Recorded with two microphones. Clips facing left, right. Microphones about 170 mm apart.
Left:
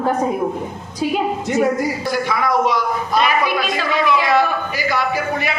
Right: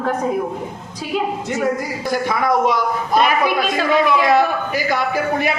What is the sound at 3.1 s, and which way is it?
A man's voice, 50° right (ahead or behind).